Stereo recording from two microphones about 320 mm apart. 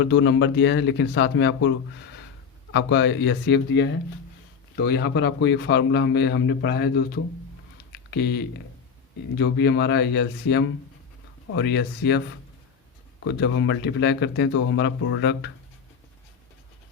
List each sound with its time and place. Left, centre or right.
0.0 s a man's voice: left
2.7 s a man's voice: left
8.1 s a man's voice: left